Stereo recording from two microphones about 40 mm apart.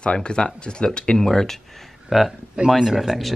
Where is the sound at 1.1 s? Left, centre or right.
Centre.